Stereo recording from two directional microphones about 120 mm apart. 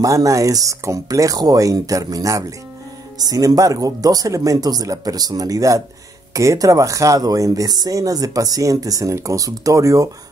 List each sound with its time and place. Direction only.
0.0 s speech: 25° right (ahead or behind)